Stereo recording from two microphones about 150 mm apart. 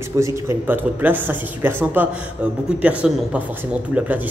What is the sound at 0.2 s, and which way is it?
A man's voice, 20° right (ahead or behind).